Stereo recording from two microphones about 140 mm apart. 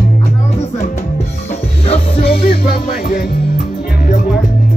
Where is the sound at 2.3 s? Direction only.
90° left.